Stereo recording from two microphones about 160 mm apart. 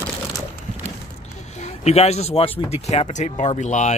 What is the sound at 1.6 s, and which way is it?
Speech, 40° left (ahead or behind).